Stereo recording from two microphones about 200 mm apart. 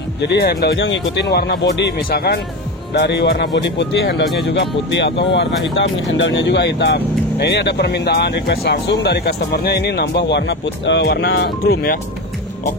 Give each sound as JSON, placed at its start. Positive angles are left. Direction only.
{"t": 0.2, "sound": "speech", "side_deg": 55}